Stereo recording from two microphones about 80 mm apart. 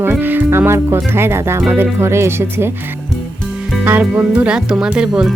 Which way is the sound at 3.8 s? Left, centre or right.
Right.